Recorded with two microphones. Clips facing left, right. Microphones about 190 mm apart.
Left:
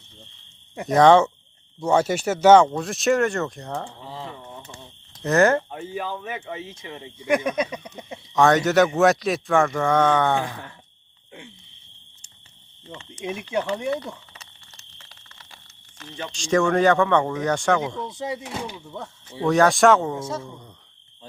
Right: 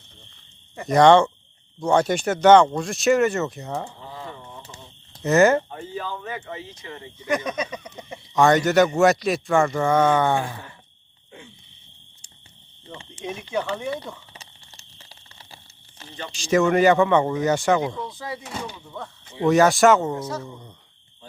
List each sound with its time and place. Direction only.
0.9 s speech: centre (ahead or behind)
5.2 s speech: centre (ahead or behind)
5.7 s speech: 10° left (ahead or behind)
12.9 s a sound: 30° right (ahead or behind)
13.2 s speech: 10° left (ahead or behind)
16.3 s speech: 5° right (ahead or behind)
18.4 s speech: 10° left (ahead or behind)
19.5 s speech: 5° right (ahead or behind)
20.1 s speech: 25° left (ahead or behind)